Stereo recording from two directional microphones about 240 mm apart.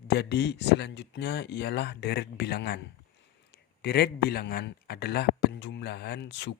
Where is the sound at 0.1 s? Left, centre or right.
Left.